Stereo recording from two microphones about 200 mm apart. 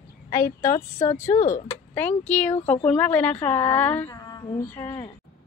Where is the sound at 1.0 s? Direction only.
35° left (ahead or behind).